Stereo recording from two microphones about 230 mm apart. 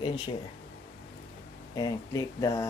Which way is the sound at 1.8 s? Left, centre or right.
Centre.